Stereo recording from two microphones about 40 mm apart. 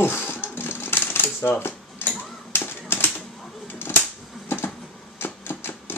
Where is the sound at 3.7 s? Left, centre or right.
Left.